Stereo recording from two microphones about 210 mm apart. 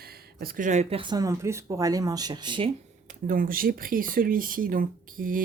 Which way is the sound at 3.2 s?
40° right (ahead or behind).